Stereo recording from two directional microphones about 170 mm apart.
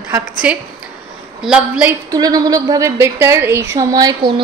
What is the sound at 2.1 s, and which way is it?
A woman's voice, 20° right (ahead or behind).